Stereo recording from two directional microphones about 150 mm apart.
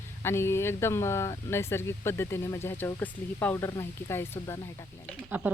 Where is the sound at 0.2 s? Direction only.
15° left (ahead or behind).